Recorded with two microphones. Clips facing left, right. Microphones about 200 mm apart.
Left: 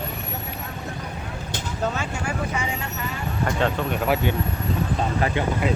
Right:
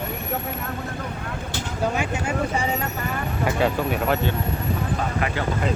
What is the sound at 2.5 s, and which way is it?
Speech, 35° right (ahead or behind).